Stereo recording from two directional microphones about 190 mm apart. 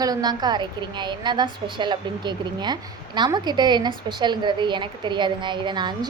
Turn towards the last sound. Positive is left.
turn(degrees=-25)  # may be behind; listen again after turning